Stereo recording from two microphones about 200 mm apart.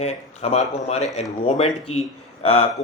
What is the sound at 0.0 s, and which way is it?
Speech, 30° left (ahead or behind).